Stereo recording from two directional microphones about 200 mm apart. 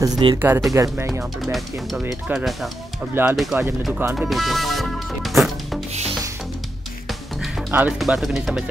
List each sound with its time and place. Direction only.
0.0 s speech: 20° right (ahead or behind)
0.4 s speech: 10° right (ahead or behind)
1.0 s speech: centre (ahead or behind)
4.3 s music: centre (ahead or behind)
7.1 s music: 5° right (ahead or behind)